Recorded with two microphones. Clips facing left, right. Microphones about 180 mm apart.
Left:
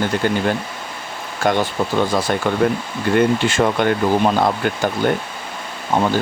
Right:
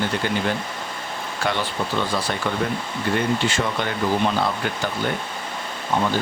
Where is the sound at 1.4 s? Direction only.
45° left (ahead or behind).